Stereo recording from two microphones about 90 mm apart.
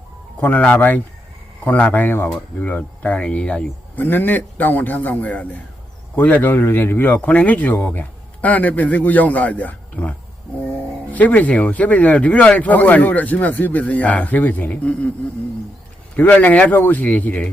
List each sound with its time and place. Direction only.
0.3 s speech: 15° left (ahead or behind)
16.1 s speech: 15° left (ahead or behind)